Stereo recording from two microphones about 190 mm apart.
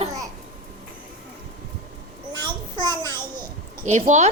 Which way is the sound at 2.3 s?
25° right (ahead or behind).